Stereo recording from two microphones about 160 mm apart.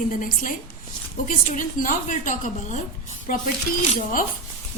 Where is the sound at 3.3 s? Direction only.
65° left (ahead or behind).